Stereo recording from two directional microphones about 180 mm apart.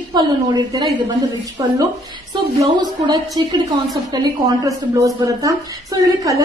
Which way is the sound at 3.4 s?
25° right (ahead or behind).